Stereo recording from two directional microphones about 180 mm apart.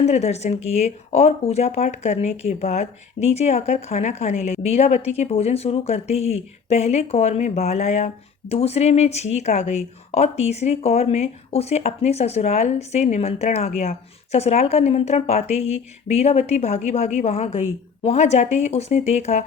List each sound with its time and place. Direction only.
0.0 s speech: 35° left (ahead or behind)